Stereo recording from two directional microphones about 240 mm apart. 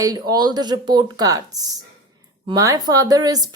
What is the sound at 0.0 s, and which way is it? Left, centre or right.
A woman's voice, centre.